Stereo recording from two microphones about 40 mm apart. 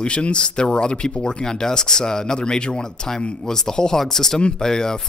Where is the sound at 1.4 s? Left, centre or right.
Centre.